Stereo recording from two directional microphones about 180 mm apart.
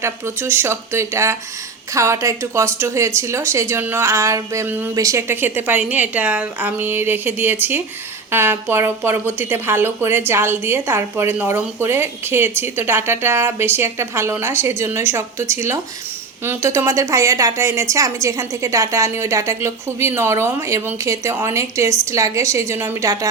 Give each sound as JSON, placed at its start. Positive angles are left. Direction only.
{"t": 0.0, "sound": "a woman's voice", "side_deg": -10}